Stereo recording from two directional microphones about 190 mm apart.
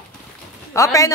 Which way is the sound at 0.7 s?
15° left (ahead or behind).